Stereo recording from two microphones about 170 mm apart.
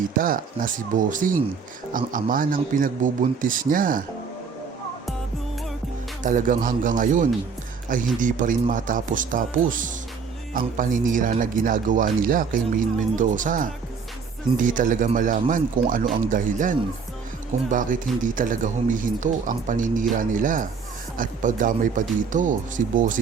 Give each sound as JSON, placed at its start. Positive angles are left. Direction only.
{"t": 0.2, "sound": "speech", "side_deg": -55}
{"t": 6.2, "sound": "speech", "side_deg": -50}